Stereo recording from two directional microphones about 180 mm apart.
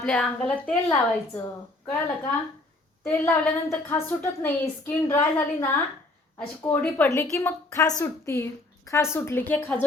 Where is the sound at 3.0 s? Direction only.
15° left (ahead or behind).